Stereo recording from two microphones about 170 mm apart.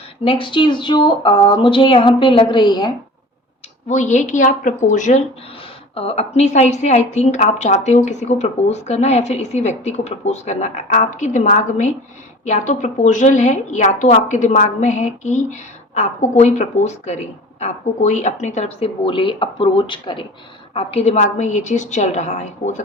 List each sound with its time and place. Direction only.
0.3 s speech: 30° left (ahead or behind)
3.8 s a woman's voice: 45° left (ahead or behind)
5.9 s a woman's voice: 35° left (ahead or behind)
19.0 s a woman's voice: 30° left (ahead or behind); by 22.8 s 45° left (ahead or behind)